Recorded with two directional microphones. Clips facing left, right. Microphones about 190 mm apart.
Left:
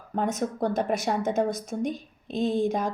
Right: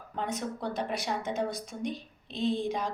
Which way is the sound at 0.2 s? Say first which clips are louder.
Left 7 dB; 45° left (ahead or behind).